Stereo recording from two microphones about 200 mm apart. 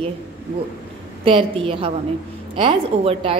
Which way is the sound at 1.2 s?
25° right (ahead or behind).